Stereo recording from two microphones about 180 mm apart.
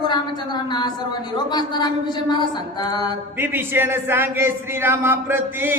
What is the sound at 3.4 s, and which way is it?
Mantra, 10° right (ahead or behind).